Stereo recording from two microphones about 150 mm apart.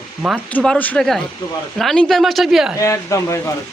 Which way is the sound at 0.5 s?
10° left (ahead or behind).